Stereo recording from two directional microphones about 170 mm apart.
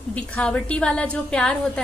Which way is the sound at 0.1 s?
5° left (ahead or behind).